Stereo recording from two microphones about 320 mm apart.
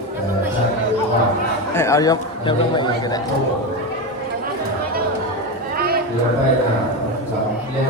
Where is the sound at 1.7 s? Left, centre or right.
Centre.